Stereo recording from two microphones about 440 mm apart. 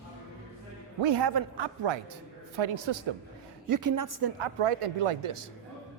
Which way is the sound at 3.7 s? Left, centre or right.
Right.